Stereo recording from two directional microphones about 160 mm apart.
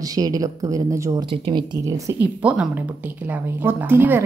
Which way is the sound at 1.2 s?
30° right (ahead or behind).